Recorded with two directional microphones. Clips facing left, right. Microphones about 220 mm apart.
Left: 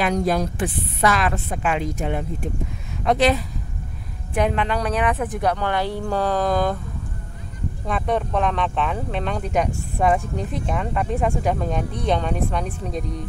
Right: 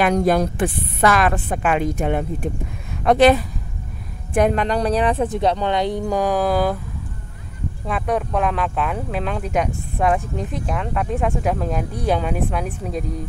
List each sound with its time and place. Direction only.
0.0 s a woman's voice: 55° right (ahead or behind)
4.3 s speech: 45° right (ahead or behind); by 6.8 s 5° right (ahead or behind)
7.8 s speech: 5° right (ahead or behind)